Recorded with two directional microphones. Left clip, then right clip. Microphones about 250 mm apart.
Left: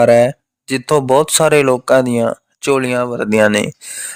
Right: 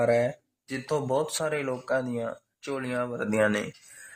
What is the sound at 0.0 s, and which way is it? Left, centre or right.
Speech, left.